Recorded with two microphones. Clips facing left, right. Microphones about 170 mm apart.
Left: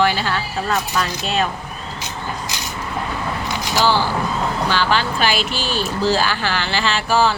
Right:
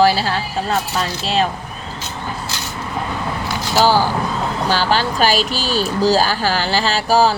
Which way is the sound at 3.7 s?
40° right (ahead or behind).